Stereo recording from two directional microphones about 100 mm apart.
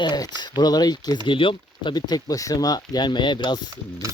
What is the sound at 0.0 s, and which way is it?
Speech, 45° left (ahead or behind).